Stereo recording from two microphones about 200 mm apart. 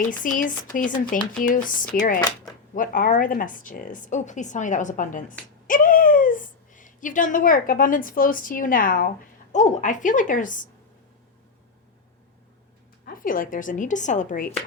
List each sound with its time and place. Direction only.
0.2 s a woman's voice: 40° left (ahead or behind)
13.1 s speech: 45° left (ahead or behind)